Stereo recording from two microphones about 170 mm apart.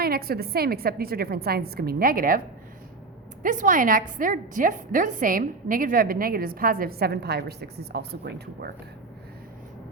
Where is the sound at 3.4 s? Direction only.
50° right (ahead or behind); by 8.7 s 70° right (ahead or behind).